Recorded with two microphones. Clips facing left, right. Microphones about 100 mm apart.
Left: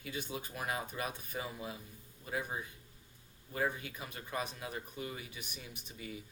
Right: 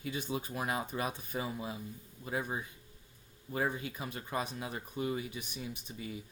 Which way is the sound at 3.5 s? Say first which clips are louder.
Right 2 dB; 25° right (ahead or behind).